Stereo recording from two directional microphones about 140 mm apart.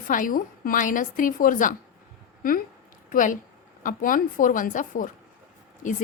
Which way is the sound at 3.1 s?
70° left (ahead or behind).